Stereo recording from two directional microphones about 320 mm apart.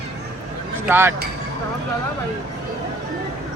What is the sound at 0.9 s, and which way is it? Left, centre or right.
Speech, centre.